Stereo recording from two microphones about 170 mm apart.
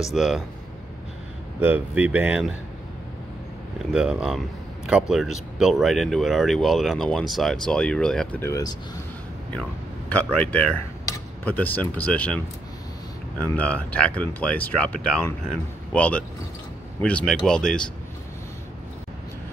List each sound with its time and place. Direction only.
0.1 s speech: 5° right (ahead or behind)
1.6 s speech: 10° right (ahead or behind)
3.9 s speech: 5° right (ahead or behind)
8.4 s speech: 20° left (ahead or behind)
13.4 s speech: 10° left (ahead or behind)